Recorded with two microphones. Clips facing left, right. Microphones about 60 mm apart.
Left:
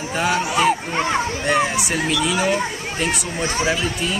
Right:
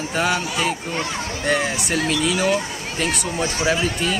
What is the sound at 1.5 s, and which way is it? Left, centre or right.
Speech, centre.